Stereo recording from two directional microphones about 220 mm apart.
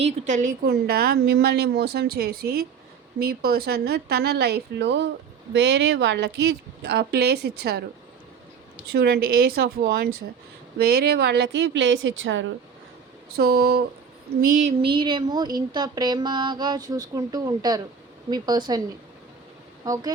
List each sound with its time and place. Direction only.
0.0 s a woman's voice: 35° right (ahead or behind)
8.9 s a woman's voice: 45° right (ahead or behind)
13.3 s a woman's voice: 45° right (ahead or behind)
14.4 s a sound: 35° right (ahead or behind)
14.8 s a sound: 25° right (ahead or behind)
19.8 s speech: 15° right (ahead or behind)